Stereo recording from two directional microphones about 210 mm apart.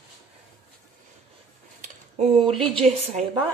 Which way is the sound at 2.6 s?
30° right (ahead or behind).